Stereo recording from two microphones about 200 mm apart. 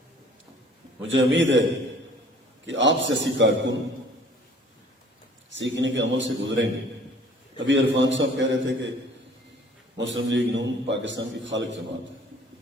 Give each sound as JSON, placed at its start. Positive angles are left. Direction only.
{"t": 1.0, "sound": "a man's voice", "side_deg": -65}
{"t": 2.6, "sound": "a man's voice", "side_deg": -65}
{"t": 5.5, "sound": "a man's voice", "side_deg": -65}
{"t": 7.7, "sound": "a man's voice", "side_deg": -65}
{"t": 10.0, "sound": "a man's voice", "side_deg": -65}